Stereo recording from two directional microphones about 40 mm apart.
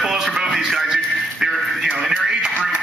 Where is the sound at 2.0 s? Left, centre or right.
Centre.